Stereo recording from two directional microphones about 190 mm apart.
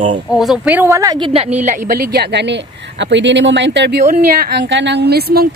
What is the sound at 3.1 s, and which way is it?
A woman's voice, 70° right (ahead or behind).